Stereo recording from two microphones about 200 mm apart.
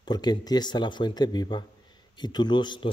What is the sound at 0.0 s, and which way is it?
Speech, 20° left (ahead or behind).